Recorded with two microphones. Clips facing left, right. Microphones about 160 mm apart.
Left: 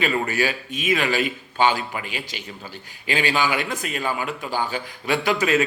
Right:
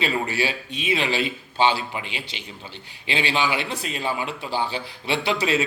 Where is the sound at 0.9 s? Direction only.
25° right (ahead or behind).